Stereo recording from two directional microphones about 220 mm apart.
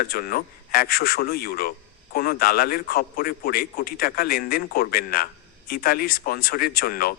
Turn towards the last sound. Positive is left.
turn(degrees=40)  # may be behind; listen again after turning